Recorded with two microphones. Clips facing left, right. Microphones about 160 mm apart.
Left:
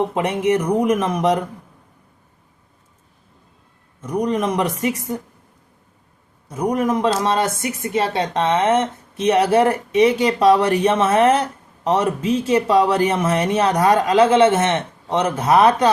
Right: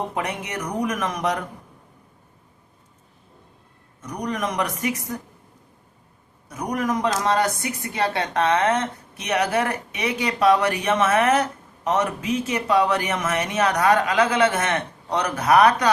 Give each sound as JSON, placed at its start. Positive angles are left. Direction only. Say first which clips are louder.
{"t": 0.1, "sound": "speech", "louder": "left 10 dB", "side_deg": 30}
{"t": 4.2, "sound": "speech", "louder": "left 6 dB", "side_deg": 30}
{"t": 6.5, "sound": "speech", "louder": "left 5 dB", "side_deg": 30}